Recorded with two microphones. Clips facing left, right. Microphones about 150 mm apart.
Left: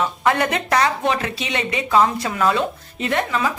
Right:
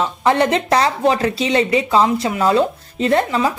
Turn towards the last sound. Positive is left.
turn(degrees=-30)  # may be behind; listen again after turning